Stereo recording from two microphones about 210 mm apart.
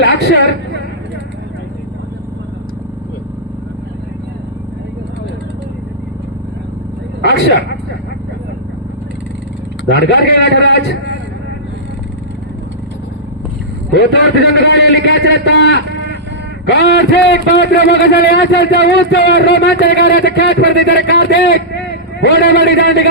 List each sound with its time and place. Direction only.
7.2 s a sound: 55° left (ahead or behind)
9.9 s a man's voice: 55° left (ahead or behind)
13.9 s a man's voice: 55° left (ahead or behind)